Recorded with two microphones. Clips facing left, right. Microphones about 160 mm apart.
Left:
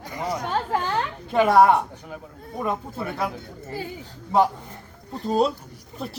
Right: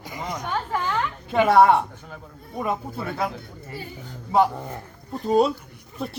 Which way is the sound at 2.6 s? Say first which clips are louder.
Right 1 dB; 10° right (ahead or behind).